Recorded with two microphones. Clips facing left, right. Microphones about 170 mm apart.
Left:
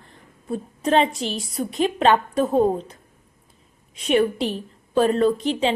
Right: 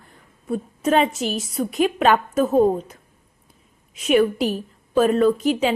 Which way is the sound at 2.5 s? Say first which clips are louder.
Right 2 dB; 5° right (ahead or behind).